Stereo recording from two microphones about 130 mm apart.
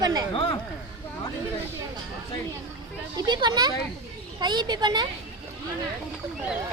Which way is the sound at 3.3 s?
35° right (ahead or behind).